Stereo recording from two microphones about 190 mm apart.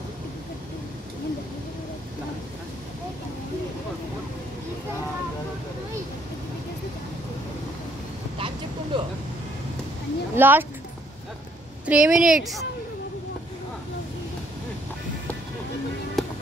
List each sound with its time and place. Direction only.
8.4 s vehicle: 25° right (ahead or behind)
10.3 s speech: 10° right (ahead or behind)
11.8 s a woman's voice: 5° right (ahead or behind)
16.2 s music: centre (ahead or behind)